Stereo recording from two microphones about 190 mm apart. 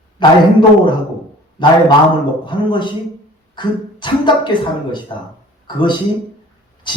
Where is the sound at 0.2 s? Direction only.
25° left (ahead or behind).